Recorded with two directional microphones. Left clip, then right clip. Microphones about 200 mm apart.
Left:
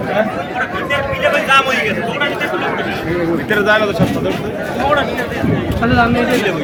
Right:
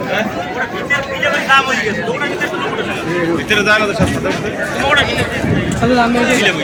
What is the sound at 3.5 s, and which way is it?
Speech, 20° left (ahead or behind).